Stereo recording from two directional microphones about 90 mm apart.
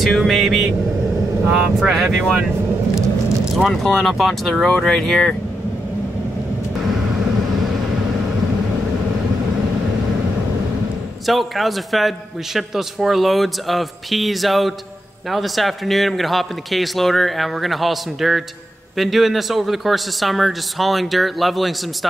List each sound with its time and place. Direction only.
0.0 s a man's voice: centre (ahead or behind)
3.5 s a man's voice: centre (ahead or behind)
11.2 s a man's voice: centre (ahead or behind)